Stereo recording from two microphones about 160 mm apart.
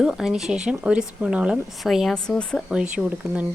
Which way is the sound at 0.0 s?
5° right (ahead or behind).